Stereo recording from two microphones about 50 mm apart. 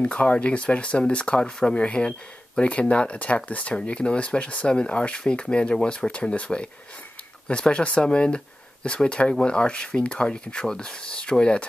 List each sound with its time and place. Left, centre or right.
0.0 s speech: left